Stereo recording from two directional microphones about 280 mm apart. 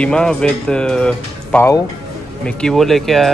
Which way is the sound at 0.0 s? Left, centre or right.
Centre.